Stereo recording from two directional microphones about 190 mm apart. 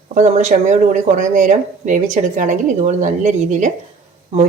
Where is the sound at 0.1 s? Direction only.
35° right (ahead or behind).